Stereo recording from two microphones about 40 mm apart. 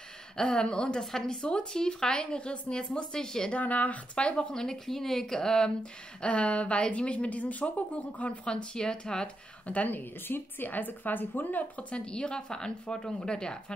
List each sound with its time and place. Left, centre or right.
0.4 s a woman's voice: left
3.5 s speech: left; by 5.7 s centre
5.8 s a woman's voice: left
8.5 s a woman's voice: left
9.7 s speech: left
11.9 s a woman's voice: left